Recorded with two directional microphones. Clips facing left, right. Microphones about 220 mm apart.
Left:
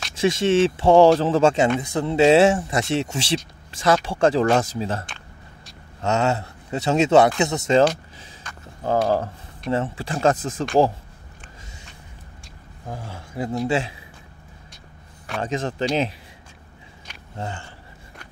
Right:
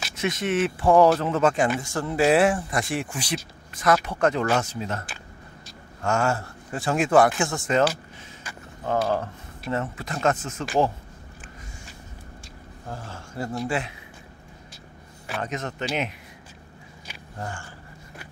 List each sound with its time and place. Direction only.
0.2 s speech: 30° left (ahead or behind)
6.0 s speech: 20° left (ahead or behind)
8.8 s speech: 35° left (ahead or behind)
12.8 s speech: 10° left (ahead or behind)
13.7 s speech: 25° left (ahead or behind)
15.4 s speech: 30° left (ahead or behind)
17.4 s speech: 20° left (ahead or behind)